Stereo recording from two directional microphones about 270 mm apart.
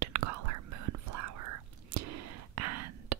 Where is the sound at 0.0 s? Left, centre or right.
Right.